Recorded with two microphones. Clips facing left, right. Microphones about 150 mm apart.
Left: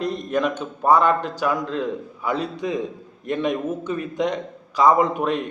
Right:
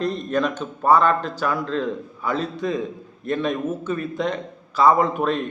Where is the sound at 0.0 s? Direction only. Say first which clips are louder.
Even; 10° left (ahead or behind).